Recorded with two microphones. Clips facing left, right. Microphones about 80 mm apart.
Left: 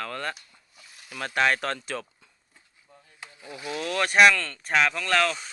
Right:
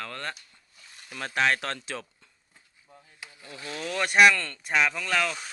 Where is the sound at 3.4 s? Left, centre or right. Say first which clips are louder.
Left 4 dB; centre.